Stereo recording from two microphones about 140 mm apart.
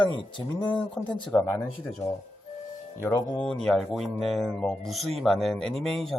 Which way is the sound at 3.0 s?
25° left (ahead or behind).